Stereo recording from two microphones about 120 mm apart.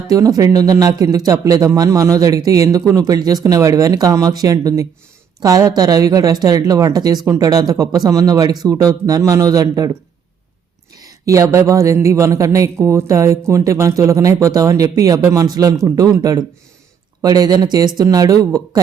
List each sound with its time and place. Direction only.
0.1 s speech: 30° right (ahead or behind)
10.9 s speech: 30° right (ahead or behind)